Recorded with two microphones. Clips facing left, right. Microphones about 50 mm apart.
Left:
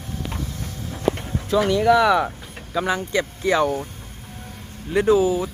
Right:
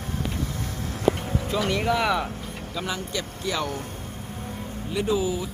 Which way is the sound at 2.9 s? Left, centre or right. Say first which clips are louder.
Left 9 dB; left.